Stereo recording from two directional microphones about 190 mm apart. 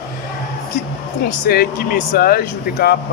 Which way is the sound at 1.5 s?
50° left (ahead or behind).